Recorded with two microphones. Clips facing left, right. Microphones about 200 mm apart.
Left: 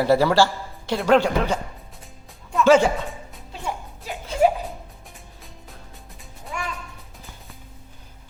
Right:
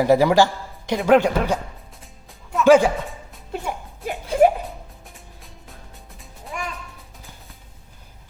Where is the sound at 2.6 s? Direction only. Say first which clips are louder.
Right 2 dB; 10° right (ahead or behind).